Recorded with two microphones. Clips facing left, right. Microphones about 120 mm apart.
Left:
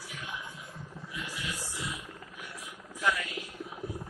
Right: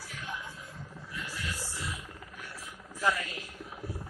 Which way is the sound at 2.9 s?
35° right (ahead or behind).